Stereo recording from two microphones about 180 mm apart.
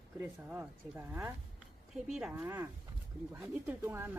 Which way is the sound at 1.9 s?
Centre (ahead or behind).